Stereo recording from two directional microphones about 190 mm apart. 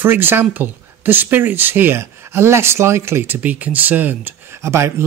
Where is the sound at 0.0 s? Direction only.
10° right (ahead or behind).